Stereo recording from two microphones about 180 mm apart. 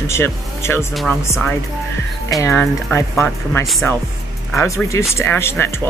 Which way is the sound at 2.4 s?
15° left (ahead or behind).